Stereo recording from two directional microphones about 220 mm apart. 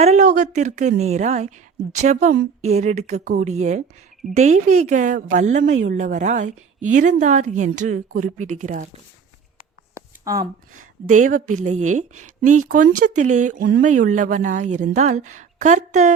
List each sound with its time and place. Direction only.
0.0 s a woman's voice: 30° right (ahead or behind)
9.9 s a sound: 15° right (ahead or behind)
10.8 s a woman's voice: 35° right (ahead or behind)